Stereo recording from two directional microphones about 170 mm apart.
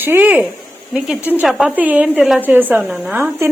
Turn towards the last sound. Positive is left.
turn(degrees=-10)  # may be behind; listen again after turning